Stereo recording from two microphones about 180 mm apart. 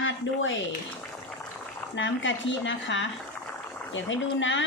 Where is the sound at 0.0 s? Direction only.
90° left.